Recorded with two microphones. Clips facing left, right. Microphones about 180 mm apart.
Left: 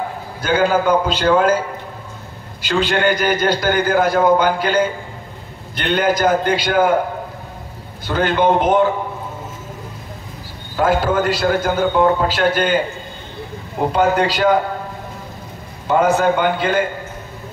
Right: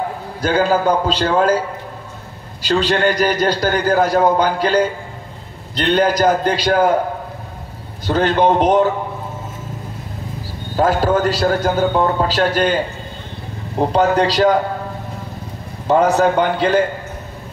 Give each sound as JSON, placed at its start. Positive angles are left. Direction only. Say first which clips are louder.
{"t": 0.4, "sound": "a man's voice", "louder": "even", "side_deg": -35}
{"t": 2.6, "sound": "a man's voice", "louder": "right 1 dB", "side_deg": -35}
{"t": 8.1, "sound": "a man's voice", "louder": "right 1 dB", "side_deg": -35}
{"t": 10.8, "sound": "a man's voice", "louder": "right 1 dB", "side_deg": -35}
{"t": 15.9, "sound": "a man's voice", "louder": "right 1 dB", "side_deg": -35}